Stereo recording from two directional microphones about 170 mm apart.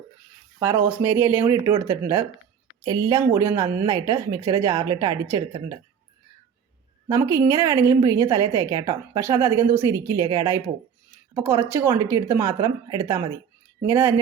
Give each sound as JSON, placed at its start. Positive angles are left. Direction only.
{"t": 0.6, "sound": "a woman's voice", "side_deg": -15}
{"t": 7.1, "sound": "a woman's voice", "side_deg": -15}